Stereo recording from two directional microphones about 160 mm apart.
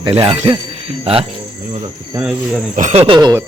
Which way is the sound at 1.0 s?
35° right (ahead or behind).